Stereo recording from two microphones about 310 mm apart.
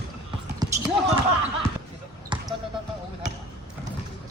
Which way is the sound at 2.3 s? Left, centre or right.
Centre.